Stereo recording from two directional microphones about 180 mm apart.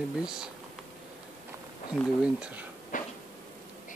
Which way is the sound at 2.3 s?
5° right (ahead or behind).